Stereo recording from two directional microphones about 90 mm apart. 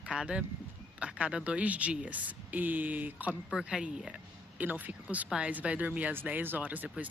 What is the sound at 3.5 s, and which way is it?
Speech, 5° right (ahead or behind).